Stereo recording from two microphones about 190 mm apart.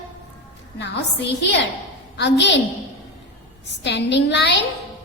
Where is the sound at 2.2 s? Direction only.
65° left (ahead or behind).